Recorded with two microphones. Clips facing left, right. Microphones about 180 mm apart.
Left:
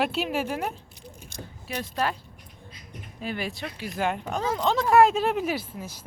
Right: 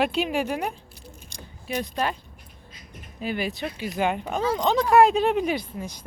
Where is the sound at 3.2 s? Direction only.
Centre (ahead or behind).